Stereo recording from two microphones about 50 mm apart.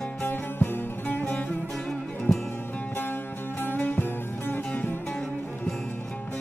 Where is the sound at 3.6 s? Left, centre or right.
Left.